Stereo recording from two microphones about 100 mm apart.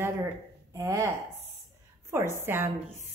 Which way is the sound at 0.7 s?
30° right (ahead or behind).